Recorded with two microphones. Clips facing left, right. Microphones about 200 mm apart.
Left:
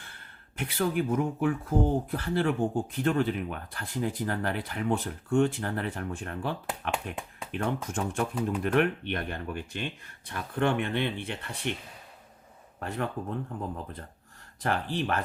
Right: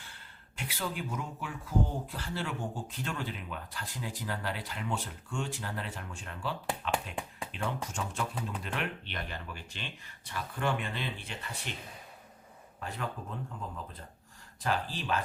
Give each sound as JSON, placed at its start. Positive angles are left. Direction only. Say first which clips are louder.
{"t": 0.0, "sound": "speech", "louder": "left 2 dB", "side_deg": 55}
{"t": 12.8, "sound": "speech", "louder": "left 6 dB", "side_deg": 60}
{"t": 14.6, "sound": "speech", "louder": "left 4 dB", "side_deg": 60}